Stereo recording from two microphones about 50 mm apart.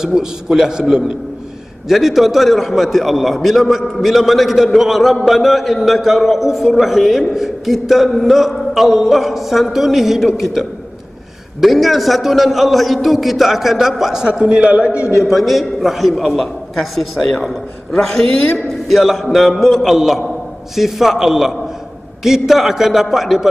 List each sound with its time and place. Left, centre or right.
0.0 s a man's voice: centre
15.0 s a man's voice: left
15.2 s a man's voice: centre
18.9 s a man's voice: centre